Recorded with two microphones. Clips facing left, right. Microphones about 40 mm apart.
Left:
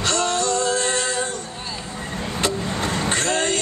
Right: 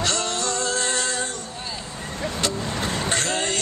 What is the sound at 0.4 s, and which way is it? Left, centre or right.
Music, centre.